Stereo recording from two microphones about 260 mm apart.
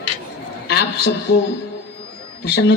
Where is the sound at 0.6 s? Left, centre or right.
Left.